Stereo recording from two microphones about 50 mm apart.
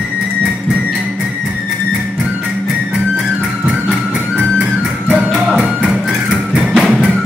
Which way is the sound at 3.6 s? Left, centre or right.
Centre.